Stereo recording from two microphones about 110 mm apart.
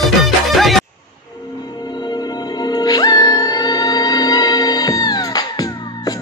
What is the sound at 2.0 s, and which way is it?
Music, 40° left (ahead or behind).